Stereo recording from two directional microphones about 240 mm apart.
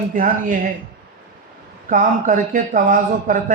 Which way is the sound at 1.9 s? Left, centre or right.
Right.